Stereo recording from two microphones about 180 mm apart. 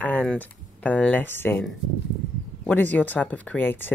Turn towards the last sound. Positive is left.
turn(degrees=10)  # may be behind; listen again after turning